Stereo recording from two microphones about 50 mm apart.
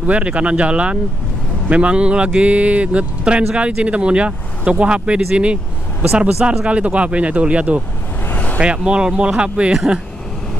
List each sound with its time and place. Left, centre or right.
0.0 s speech: right
8.3 s vehicle: left
8.5 s speech: centre